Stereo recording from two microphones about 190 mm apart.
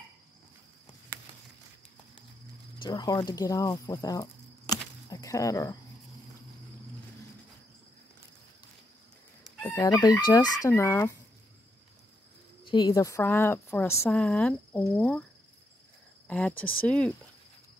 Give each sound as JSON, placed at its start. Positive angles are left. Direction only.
{"t": 2.8, "sound": "speech", "side_deg": 20}
{"t": 9.6, "sound": "chicken", "side_deg": 15}
{"t": 10.2, "sound": "a woman's voice", "side_deg": 20}
{"t": 12.6, "sound": "a woman's voice", "side_deg": 25}
{"t": 16.3, "sound": "a woman's voice", "side_deg": 5}